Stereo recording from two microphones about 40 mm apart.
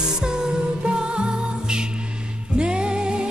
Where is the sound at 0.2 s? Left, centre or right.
Centre.